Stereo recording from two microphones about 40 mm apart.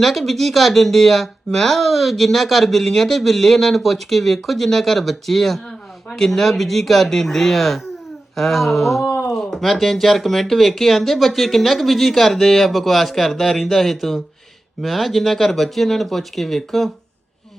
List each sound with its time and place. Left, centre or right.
0.0 s speech: centre